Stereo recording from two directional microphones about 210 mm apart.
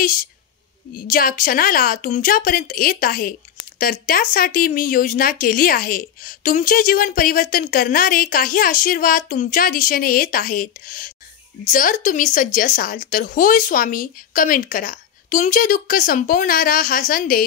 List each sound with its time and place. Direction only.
0.9 s a woman's voice: 40° left (ahead or behind)